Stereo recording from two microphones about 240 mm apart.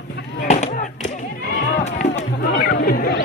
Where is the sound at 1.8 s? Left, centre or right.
Left.